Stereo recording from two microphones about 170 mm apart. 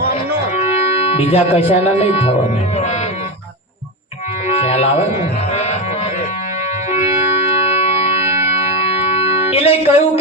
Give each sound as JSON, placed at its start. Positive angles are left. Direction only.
{"t": 0.5, "sound": "speech", "side_deg": 35}
{"t": 4.4, "sound": "music", "side_deg": 40}
{"t": 7.6, "sound": "music", "side_deg": 35}